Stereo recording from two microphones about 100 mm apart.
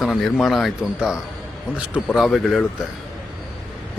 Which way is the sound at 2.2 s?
Centre (ahead or behind).